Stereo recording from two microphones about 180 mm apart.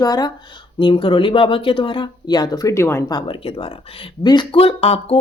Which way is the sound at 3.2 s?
30° left (ahead or behind).